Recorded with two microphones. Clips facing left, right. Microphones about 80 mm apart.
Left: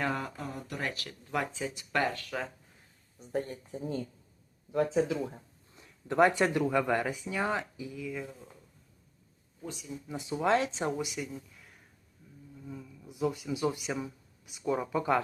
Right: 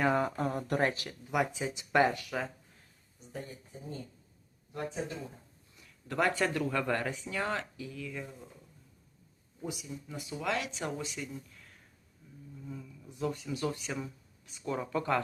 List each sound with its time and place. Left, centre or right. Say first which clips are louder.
0.0 s a sound: right 4 dB; right
0.3 s speech: right 8 dB; right
0.9 s speech: right 3 dB; right
3.2 s speech: left 9 dB; left
3.7 s speech: left 8 dB; left
5.7 s speech: left 6 dB; left; by 8.4 s centre
9.6 s speech: right 2 dB; centre
10.1 s speech: left 7 dB; left
10.9 s speech: left 4 dB; centre
11.3 s a sound: even; centre
12.6 s speech: left 1 dB; centre